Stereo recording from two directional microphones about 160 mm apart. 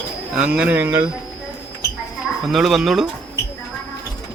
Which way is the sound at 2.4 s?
Centre (ahead or behind).